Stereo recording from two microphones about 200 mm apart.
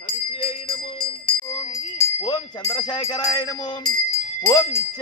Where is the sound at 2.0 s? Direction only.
20° left (ahead or behind).